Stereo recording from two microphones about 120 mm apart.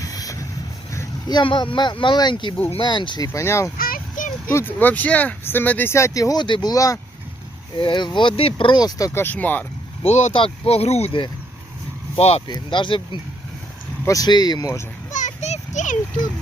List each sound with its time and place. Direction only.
0.0 s a sound: 30° left (ahead or behind)
1.3 s speech: 40° left (ahead or behind)
3.2 s speech: 20° left (ahead or behind)
7.8 s speech: 40° left (ahead or behind)
9.1 s speech: 15° left (ahead or behind)
10.0 s speech: 70° left (ahead or behind)
10.3 s speech: 50° left (ahead or behind)
12.5 s speech: 40° left (ahead or behind)
14.0 s speech: 30° left (ahead or behind)
15.1 s a sound: 80° left